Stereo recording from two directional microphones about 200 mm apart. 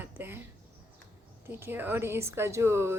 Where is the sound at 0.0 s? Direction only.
10° right (ahead or behind).